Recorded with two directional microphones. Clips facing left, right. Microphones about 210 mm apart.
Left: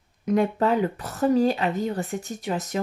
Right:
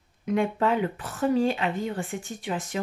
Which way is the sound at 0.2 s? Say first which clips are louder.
Left 3 dB; 40° left (ahead or behind).